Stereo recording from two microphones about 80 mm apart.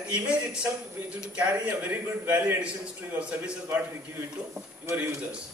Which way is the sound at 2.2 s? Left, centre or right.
Right.